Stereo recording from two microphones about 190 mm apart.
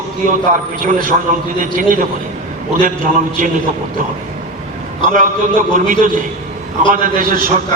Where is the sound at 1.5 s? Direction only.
45° right (ahead or behind).